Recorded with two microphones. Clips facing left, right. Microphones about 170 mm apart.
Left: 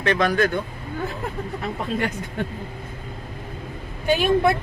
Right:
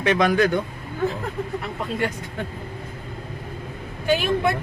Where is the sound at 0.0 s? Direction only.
15° right (ahead or behind).